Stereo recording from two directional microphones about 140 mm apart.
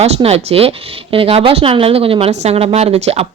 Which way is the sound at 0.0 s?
45° right (ahead or behind).